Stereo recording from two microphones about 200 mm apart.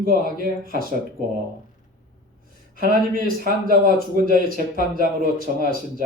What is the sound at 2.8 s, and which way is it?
Speech, 45° right (ahead or behind).